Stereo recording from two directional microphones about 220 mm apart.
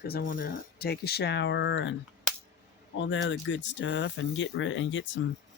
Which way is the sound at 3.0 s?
55° left (ahead or behind).